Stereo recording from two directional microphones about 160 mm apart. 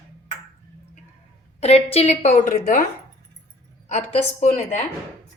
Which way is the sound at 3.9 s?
45° left (ahead or behind).